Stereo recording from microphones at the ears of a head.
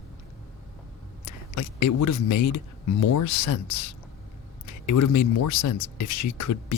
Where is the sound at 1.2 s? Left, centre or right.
Left.